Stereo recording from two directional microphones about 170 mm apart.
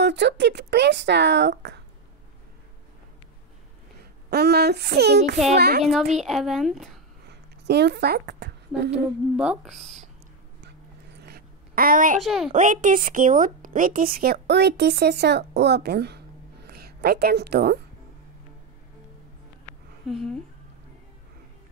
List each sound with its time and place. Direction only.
0.0 s speech: 90° right
4.3 s speech: 70° right (ahead or behind)
6.1 s speech: centre (ahead or behind)
7.2 s speech: 80° right
8.9 s speech: 5° right (ahead or behind)
11.1 s a sound: 65° right (ahead or behind)
12.2 s speech: centre (ahead or behind)
12.5 s a woman's voice: 50° right (ahead or behind); by 17.7 s 70° right (ahead or behind)
20.1 s speech: centre (ahead or behind)